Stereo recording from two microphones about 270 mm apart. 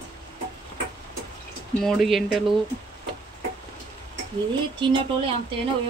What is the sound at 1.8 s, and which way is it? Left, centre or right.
Speech, centre.